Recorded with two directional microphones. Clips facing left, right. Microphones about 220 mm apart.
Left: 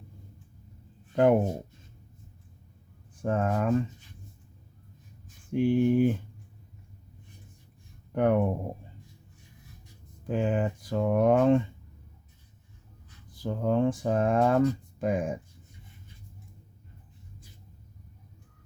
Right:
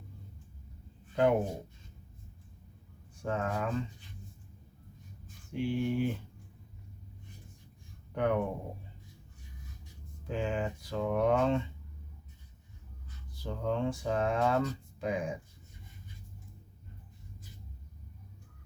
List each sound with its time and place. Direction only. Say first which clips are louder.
1.1 s speech: left 5 dB; 50° left (ahead or behind)
3.2 s speech: left 6 dB; 50° left (ahead or behind)
5.5 s speech: left 8 dB; 50° left (ahead or behind)
8.1 s speech: left 6 dB; 45° left (ahead or behind)
10.2 s speech: left 6 dB; 50° left (ahead or behind)
13.3 s speech: left 7 dB; 45° left (ahead or behind)